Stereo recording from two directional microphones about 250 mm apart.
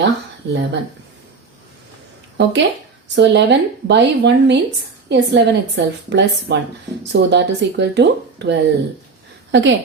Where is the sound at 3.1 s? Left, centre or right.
Right.